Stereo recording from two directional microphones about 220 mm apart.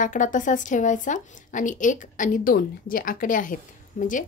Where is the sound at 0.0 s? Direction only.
35° left (ahead or behind).